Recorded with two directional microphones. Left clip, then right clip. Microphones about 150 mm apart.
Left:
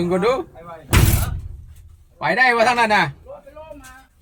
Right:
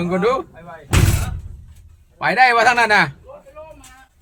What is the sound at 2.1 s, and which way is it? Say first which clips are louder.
Speech: right 2 dB; 20° right (ahead or behind).